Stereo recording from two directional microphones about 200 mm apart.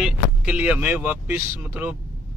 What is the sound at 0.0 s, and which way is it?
Speech, 5° right (ahead or behind).